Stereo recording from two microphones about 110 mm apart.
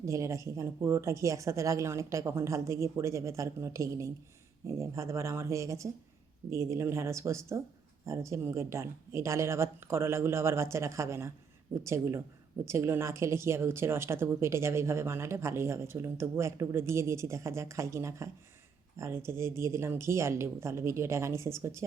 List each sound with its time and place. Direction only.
0.0 s speech: 30° right (ahead or behind)